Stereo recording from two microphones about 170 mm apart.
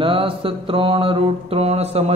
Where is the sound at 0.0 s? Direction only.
30° right (ahead or behind).